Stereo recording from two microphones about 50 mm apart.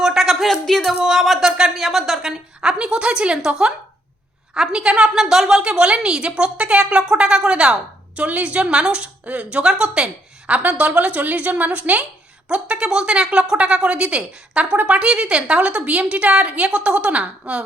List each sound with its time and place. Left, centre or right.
0.0 s a sound: centre
0.6 s speech: centre
2.6 s a woman's voice: centre